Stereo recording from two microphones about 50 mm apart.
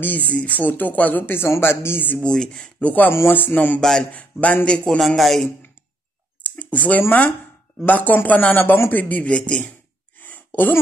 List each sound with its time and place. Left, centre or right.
0.0 s speech: left
2.3 s speech: centre
2.8 s speech: left
3.1 s speech: left
3.5 s a man's voice: left
4.6 s a man's voice: centre
5.0 s speech: centre
6.4 s speech: left
10.1 s a sound: left